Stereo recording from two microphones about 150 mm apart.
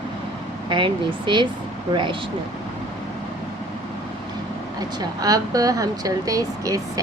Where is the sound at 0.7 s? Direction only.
35° right (ahead or behind).